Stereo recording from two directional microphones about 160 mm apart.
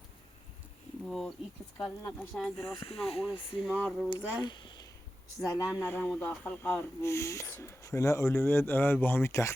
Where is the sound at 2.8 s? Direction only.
40° left (ahead or behind).